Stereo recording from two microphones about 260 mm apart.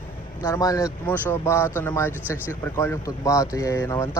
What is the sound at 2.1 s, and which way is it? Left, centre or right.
Speech, centre.